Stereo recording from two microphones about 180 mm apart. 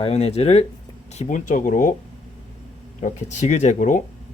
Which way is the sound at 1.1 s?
45° left (ahead or behind).